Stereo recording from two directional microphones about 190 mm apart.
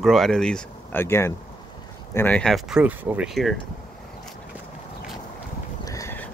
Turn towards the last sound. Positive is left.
turn(degrees=15)  # may be behind; listen again after turning